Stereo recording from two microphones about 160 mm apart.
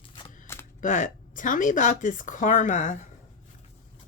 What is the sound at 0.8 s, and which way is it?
Speech, 50° left (ahead or behind).